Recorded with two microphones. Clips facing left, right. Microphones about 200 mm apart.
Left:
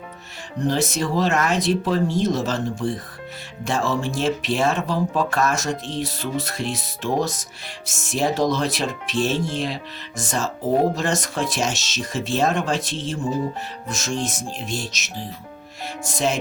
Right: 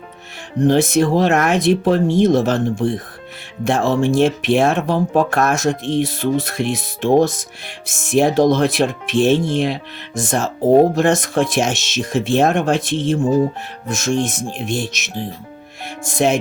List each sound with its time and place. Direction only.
0.6 s speech: 50° right (ahead or behind)